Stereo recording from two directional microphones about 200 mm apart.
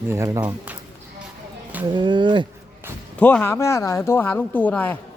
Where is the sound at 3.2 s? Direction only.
10° left (ahead or behind).